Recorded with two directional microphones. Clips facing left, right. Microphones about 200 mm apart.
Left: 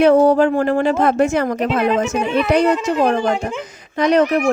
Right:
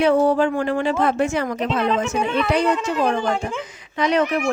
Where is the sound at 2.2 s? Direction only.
10° left (ahead or behind).